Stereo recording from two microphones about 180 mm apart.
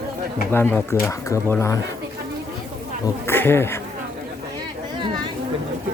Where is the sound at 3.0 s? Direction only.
15° left (ahead or behind).